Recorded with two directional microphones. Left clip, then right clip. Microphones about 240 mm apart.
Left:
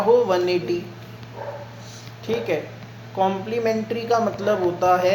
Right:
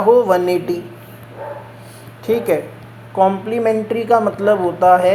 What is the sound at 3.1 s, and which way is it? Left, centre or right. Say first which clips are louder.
A woman's voice: right 7 dB; right.